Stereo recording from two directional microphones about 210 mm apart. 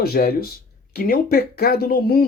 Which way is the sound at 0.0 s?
45° left (ahead or behind).